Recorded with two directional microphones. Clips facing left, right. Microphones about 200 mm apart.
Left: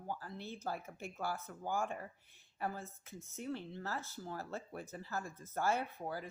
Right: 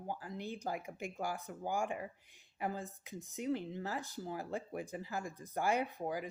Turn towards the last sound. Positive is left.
turn(degrees=-15)  # may be behind; listen again after turning